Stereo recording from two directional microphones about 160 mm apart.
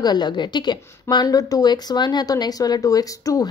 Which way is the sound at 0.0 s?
25° left (ahead or behind).